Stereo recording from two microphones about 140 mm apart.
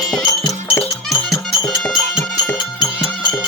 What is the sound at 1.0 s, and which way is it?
Music, centre (ahead or behind).